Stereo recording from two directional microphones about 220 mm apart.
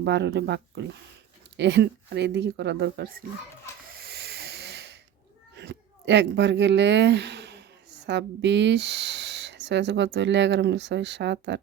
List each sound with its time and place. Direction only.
0.0 s speech: 50° right (ahead or behind)
4.0 s hiss: 45° right (ahead or behind)
5.5 s speech: 50° right (ahead or behind)